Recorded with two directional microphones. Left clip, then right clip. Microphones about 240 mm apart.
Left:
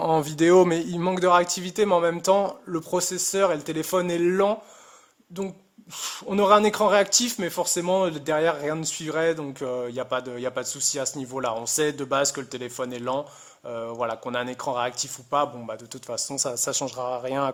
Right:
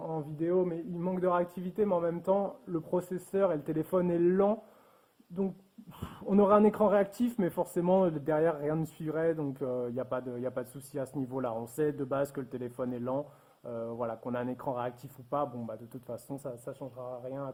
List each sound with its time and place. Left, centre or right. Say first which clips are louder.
0.0 s speech: left 14 dB; left; by 4.5 s centre
6.2 s speech: left 6 dB; centre; by 17.5 s left